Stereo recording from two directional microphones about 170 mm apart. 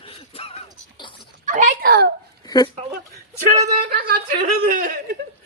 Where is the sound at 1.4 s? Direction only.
50° right (ahead or behind).